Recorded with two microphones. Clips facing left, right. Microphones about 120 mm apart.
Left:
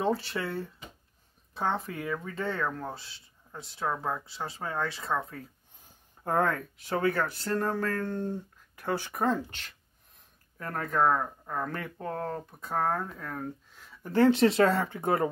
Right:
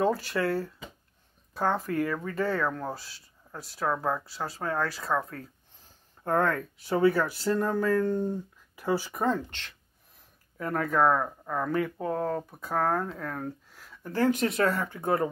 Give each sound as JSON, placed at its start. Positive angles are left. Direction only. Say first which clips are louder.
{"t": 0.0, "sound": "speech", "louder": "right 3 dB", "side_deg": 0}
{"t": 6.9, "sound": "speech", "louder": "right 4 dB", "side_deg": -10}
{"t": 10.6, "sound": "speech", "louder": "right 3 dB", "side_deg": -10}
{"t": 12.6, "sound": "speech", "louder": "right 2 dB", "side_deg": 0}
{"t": 14.0, "sound": "speech", "louder": "left 4 dB", "side_deg": 20}